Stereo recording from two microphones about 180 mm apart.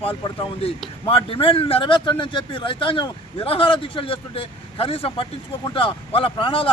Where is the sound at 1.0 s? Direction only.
30° left (ahead or behind).